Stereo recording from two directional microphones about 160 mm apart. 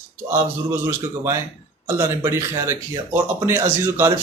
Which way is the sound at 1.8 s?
15° right (ahead or behind).